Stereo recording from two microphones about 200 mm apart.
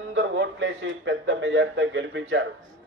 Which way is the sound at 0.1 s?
65° right (ahead or behind).